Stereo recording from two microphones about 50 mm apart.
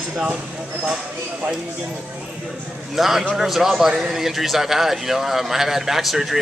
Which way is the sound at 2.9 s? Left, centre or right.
Centre.